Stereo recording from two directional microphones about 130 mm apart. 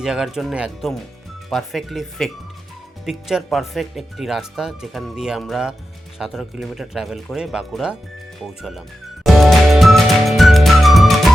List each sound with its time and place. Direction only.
0.0 s speech: 5° right (ahead or behind)
9.2 s music: centre (ahead or behind)